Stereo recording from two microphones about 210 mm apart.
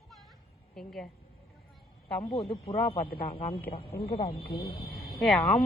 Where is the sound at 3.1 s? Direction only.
45° left (ahead or behind).